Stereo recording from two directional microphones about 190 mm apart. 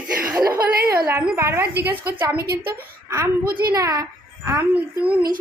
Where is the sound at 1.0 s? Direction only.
10° right (ahead or behind).